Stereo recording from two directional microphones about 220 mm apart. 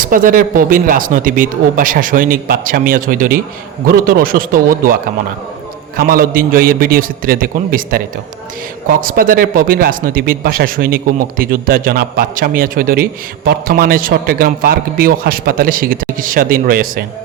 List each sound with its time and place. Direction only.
0.0 s speech: 40° right (ahead or behind)
6.0 s speech: 40° right (ahead or behind)